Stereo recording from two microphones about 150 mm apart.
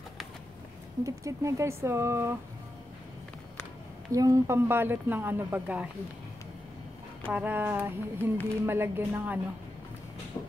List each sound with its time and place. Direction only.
1.0 s speech: 20° right (ahead or behind)
4.1 s speech: 20° right (ahead or behind)
7.3 s speech: 10° right (ahead or behind)
10.4 s a sound: 15° left (ahead or behind)